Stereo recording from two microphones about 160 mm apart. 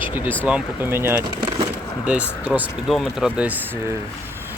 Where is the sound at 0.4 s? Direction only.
10° right (ahead or behind).